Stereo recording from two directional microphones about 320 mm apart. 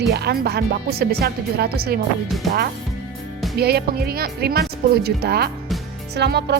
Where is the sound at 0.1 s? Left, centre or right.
Right.